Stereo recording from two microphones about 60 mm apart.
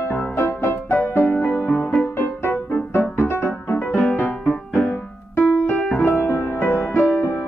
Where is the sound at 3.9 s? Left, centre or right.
Left.